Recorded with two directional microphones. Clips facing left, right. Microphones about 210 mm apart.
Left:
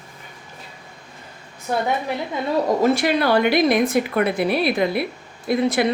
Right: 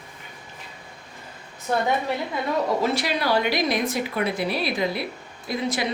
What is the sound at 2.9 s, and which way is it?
A woman's voice, 55° left (ahead or behind).